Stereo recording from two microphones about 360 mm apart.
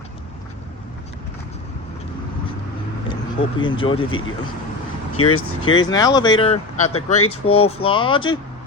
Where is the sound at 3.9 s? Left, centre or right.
Left.